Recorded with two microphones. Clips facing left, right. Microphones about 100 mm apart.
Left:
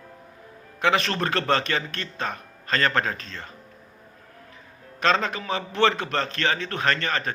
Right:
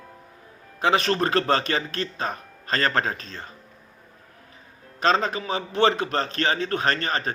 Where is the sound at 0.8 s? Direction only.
30° right (ahead or behind).